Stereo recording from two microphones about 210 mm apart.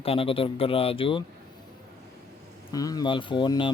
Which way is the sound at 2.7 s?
20° left (ahead or behind).